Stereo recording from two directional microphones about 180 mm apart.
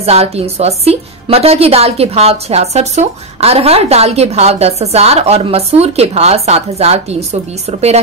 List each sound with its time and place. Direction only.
0.0 s a woman's voice: 35° right (ahead or behind)